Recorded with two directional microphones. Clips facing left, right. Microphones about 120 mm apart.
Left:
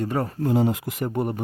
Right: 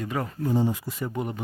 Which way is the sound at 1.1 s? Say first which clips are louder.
Left 6 dB; 45° left (ahead or behind).